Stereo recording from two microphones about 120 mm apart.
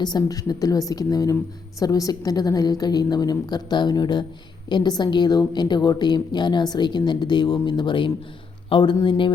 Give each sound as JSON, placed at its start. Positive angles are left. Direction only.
{"t": 0.0, "sound": "a woman's voice", "side_deg": 35}